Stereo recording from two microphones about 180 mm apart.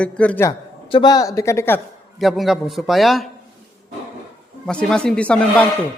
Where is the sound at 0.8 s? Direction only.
25° left (ahead or behind).